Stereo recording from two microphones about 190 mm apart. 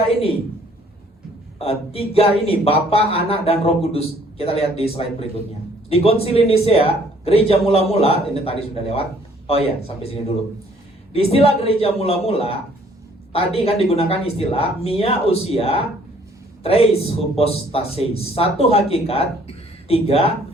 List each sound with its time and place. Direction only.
1.5 s speech: 30° left (ahead or behind)